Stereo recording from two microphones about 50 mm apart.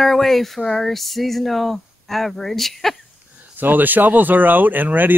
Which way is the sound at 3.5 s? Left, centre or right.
Right.